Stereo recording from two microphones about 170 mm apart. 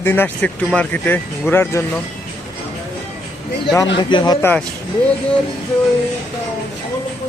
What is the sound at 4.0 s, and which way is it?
Speech, 25° left (ahead or behind).